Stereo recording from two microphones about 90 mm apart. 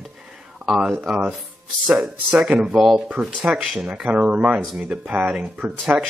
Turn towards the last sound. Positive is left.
turn(degrees=-15)  # may be behind; listen again after turning